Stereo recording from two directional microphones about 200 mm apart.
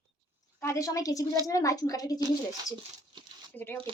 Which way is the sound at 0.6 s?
15° left (ahead or behind).